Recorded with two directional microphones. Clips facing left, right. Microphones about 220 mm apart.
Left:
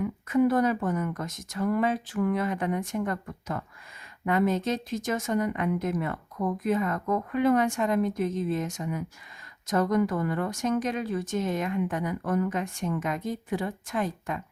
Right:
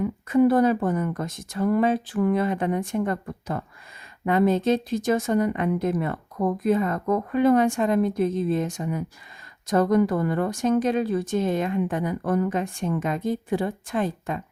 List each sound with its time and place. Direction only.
0.0 s speech: 30° right (ahead or behind)